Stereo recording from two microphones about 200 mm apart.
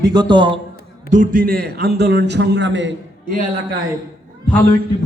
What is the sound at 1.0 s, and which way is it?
A man's voice, 40° right (ahead or behind).